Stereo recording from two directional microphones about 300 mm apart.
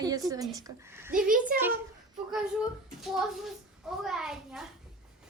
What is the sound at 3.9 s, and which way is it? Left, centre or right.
Speech, centre.